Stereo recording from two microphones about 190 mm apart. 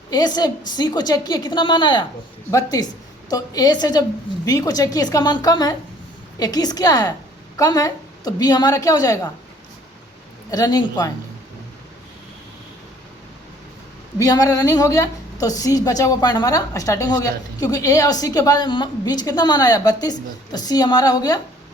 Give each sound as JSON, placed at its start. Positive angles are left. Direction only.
{"t": 0.1, "sound": "a woman's voice", "side_deg": 20}
{"t": 10.5, "sound": "a woman's voice", "side_deg": 20}
{"t": 14.2, "sound": "a woman's voice", "side_deg": 20}